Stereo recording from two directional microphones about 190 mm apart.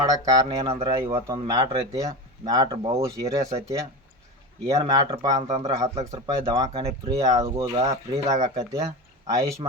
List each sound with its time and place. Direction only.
0.3 s speech: 20° right (ahead or behind)
1.0 s speech: 15° right (ahead or behind)
5.4 s speech: 35° right (ahead or behind)
5.6 s speech: 20° right (ahead or behind)